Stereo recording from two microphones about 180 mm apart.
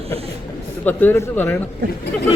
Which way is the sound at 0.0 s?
35° right (ahead or behind).